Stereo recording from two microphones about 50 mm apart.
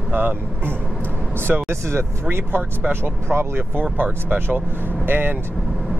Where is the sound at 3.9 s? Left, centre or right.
Right.